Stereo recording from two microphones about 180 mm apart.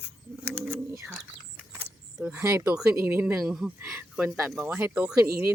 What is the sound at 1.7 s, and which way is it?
Speech, 10° right (ahead or behind).